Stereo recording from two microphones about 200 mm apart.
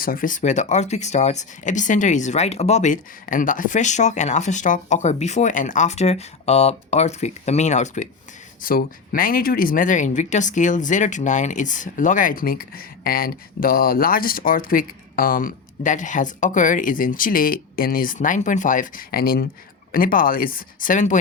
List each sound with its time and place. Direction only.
0.0 s speech: 45° left (ahead or behind)